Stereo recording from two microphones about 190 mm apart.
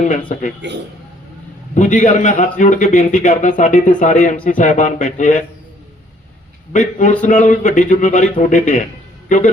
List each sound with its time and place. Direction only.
0.6 s a man's voice: 65° right (ahead or behind)
1.7 s a man's voice: 40° left (ahead or behind)
6.7 s a man's voice: 40° left (ahead or behind)